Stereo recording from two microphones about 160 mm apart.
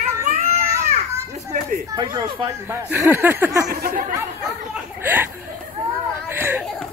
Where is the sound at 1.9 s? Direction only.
25° right (ahead or behind).